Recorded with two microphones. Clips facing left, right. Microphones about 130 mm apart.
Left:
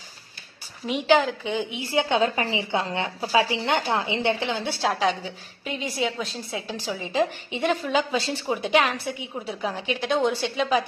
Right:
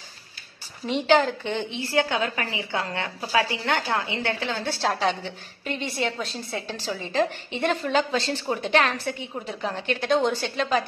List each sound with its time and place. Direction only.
0.8 s a woman's voice: 5° left (ahead or behind); by 4.7 s 20° left (ahead or behind)
4.8 s a woman's voice: centre (ahead or behind)